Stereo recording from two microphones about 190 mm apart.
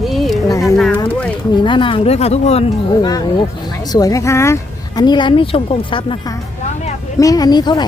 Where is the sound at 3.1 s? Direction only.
20° left (ahead or behind).